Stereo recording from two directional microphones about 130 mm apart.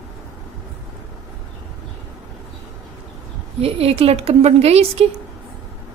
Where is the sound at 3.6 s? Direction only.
50° right (ahead or behind).